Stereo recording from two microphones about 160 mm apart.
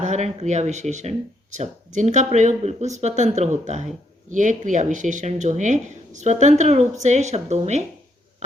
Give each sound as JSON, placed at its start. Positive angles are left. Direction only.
{"t": 0.0, "sound": "speech", "side_deg": -45}